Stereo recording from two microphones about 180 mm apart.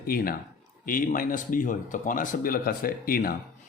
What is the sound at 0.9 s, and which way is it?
Speech, 50° left (ahead or behind).